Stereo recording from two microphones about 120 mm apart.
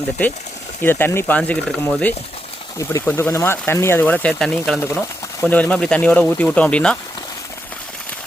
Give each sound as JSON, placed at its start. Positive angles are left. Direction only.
{"t": 0.8, "sound": "speech", "side_deg": 20}
{"t": 4.8, "sound": "speech", "side_deg": 15}